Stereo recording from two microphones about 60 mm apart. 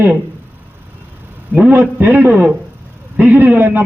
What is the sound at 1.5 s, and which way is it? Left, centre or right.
A man's voice, right.